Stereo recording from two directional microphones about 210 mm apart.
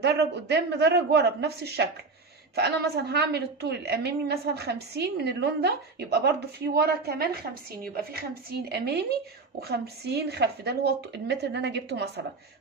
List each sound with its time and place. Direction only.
0.0 s a woman's voice: 55° right (ahead or behind)